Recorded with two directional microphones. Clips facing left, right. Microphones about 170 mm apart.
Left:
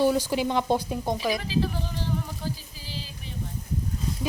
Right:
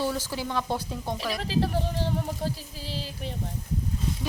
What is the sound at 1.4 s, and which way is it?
Speech, 70° right (ahead or behind).